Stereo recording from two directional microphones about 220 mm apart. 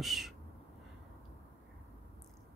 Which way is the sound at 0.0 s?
Centre (ahead or behind).